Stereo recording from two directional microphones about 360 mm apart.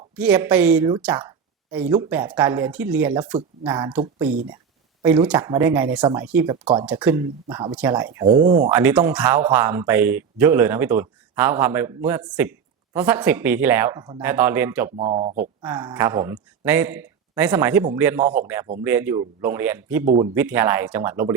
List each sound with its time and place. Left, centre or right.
0.2 s speech: centre
8.7 s speech: centre
15.6 s speech: centre